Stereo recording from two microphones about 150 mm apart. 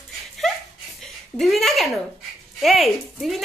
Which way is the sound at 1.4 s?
Centre (ahead or behind).